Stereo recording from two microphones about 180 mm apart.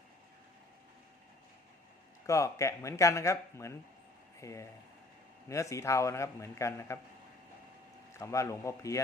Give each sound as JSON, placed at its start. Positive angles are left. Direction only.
{"t": 2.2, "sound": "speech", "side_deg": 15}
{"t": 8.2, "sound": "speech", "side_deg": 15}